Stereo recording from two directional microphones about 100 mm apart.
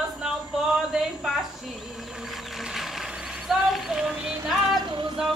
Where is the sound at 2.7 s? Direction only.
5° right (ahead or behind).